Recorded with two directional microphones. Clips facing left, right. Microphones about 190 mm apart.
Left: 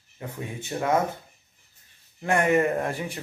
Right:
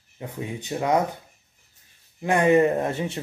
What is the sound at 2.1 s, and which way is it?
A man's voice, 15° right (ahead or behind).